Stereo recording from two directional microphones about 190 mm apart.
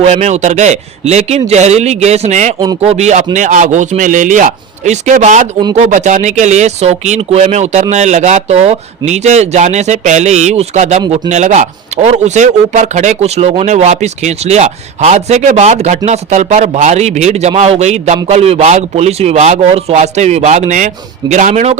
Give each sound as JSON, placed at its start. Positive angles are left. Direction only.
{"t": 0.0, "sound": "a man's voice", "side_deg": -35}